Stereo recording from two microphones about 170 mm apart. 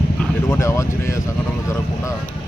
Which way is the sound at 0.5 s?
15° left (ahead or behind).